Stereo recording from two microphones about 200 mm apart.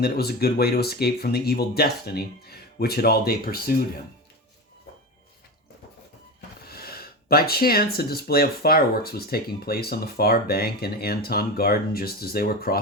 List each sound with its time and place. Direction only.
0.0 s speech: 50° left (ahead or behind)
6.7 s speech: 50° left (ahead or behind)